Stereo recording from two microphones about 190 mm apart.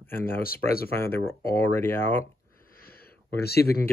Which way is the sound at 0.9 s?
10° left (ahead or behind).